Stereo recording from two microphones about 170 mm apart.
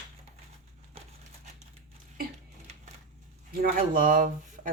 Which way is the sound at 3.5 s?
60° right (ahead or behind).